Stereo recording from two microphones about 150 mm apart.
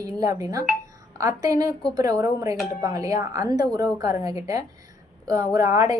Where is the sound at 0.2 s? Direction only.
20° right (ahead or behind).